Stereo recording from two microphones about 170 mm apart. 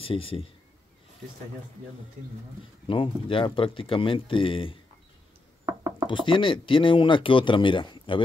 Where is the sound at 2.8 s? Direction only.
30° left (ahead or behind).